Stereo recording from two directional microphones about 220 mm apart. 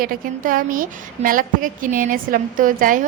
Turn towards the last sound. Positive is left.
turn(degrees=-40)  # may be behind; listen again after turning